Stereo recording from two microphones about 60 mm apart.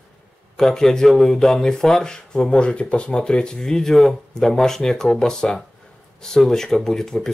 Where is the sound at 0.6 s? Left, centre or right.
Centre.